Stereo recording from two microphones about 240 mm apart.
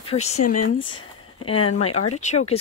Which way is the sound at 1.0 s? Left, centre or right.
Left.